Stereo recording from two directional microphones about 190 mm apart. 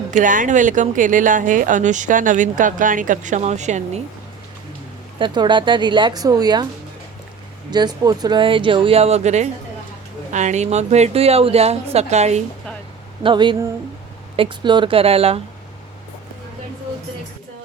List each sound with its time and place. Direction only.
0.1 s speech: 45° right (ahead or behind)
5.2 s speech: 25° right (ahead or behind)
7.7 s speech: 20° right (ahead or behind)
13.2 s speech: 25° right (ahead or behind)